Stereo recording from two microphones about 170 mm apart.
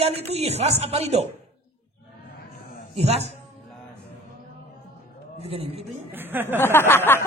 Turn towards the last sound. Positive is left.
turn(degrees=15)  # may be behind; listen again after turning